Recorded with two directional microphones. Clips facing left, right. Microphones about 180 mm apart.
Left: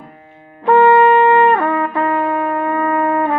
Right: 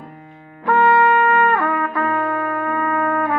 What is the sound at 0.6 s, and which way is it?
Trumpet, 25° left (ahead or behind).